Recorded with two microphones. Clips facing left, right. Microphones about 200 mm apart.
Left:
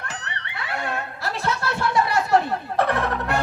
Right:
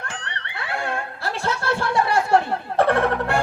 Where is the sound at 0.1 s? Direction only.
30° right (ahead or behind).